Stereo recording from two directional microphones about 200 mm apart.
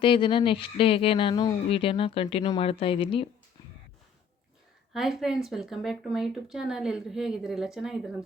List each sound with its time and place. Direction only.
0.0 s speech: 25° left (ahead or behind)
4.9 s speech: centre (ahead or behind)